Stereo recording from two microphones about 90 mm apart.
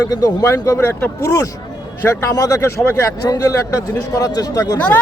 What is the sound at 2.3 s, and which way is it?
A man's voice, 40° left (ahead or behind).